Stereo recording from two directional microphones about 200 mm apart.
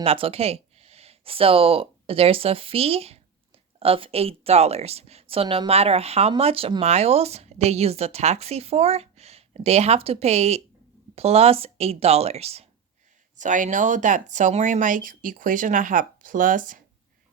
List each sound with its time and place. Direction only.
0.0 s speech: 30° right (ahead or behind)